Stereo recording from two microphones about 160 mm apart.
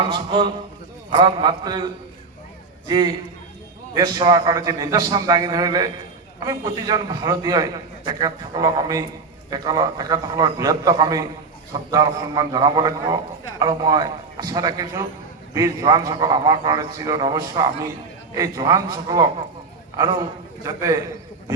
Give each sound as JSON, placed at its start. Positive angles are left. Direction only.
{"t": 0.0, "sound": "a man's voice", "side_deg": -30}